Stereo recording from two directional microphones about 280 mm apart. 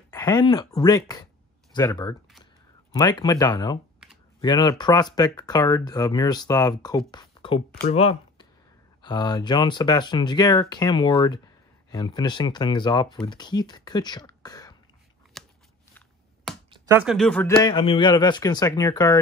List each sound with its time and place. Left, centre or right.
0.1 s speech: centre
15.3 s crunch: centre
16.7 s speech: centre